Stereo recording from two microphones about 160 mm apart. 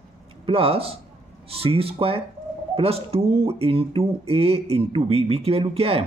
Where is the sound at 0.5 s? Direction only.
35° right (ahead or behind).